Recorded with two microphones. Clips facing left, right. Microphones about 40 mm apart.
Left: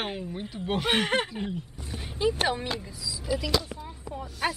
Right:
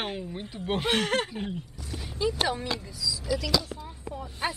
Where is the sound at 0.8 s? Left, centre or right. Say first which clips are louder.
Left 1 dB; centre.